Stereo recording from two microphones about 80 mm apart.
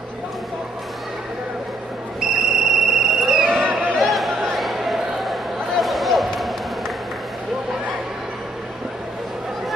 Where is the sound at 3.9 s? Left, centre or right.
Centre.